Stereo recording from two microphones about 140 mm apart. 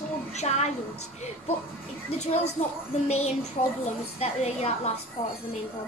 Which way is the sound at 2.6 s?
50° left (ahead or behind).